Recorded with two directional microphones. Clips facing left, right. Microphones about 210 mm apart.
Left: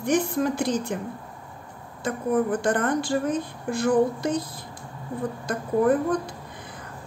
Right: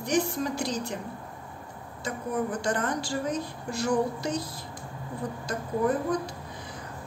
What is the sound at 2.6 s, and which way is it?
A woman's voice, 55° left (ahead or behind).